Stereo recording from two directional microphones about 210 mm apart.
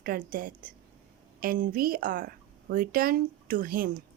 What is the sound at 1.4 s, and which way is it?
A woman's voice, 40° right (ahead or behind).